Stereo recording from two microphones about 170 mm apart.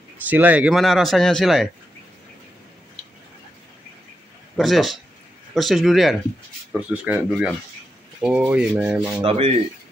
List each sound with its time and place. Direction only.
0.3 s speech: 10° right (ahead or behind)
4.6 s speech: centre (ahead or behind)
9.2 s speech: 35° right (ahead or behind)